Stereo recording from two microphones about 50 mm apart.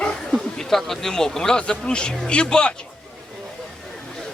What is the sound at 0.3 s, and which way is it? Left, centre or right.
Speech, centre.